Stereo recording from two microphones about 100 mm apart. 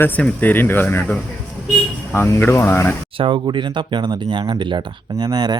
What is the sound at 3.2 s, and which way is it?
Speech, 50° right (ahead or behind).